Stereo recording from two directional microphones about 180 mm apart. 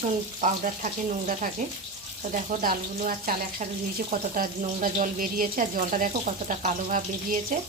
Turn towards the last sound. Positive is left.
turn(degrees=-50)  # may be behind; listen again after turning